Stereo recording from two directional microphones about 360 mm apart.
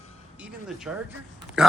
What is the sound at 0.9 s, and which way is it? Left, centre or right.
Speech, centre.